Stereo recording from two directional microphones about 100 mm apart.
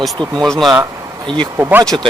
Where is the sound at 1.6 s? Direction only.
20° right (ahead or behind).